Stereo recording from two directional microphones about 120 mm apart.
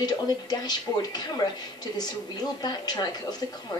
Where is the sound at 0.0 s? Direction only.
35° left (ahead or behind).